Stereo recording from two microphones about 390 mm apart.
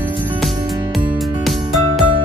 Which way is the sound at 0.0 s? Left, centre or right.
Centre.